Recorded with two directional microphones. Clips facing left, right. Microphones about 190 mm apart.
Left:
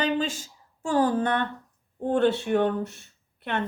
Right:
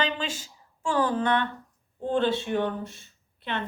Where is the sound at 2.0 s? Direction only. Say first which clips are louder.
Left 3 dB; 60° left (ahead or behind).